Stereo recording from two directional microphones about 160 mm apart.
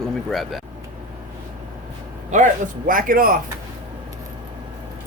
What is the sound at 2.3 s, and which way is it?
Speech, 55° right (ahead or behind).